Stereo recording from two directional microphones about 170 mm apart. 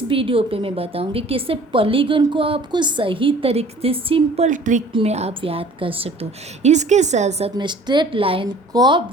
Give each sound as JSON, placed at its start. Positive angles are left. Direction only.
{"t": 0.1, "sound": "a woman's voice", "side_deg": -30}
{"t": 4.9, "sound": "a woman's voice", "side_deg": -35}
{"t": 7.5, "sound": "a woman's voice", "side_deg": -25}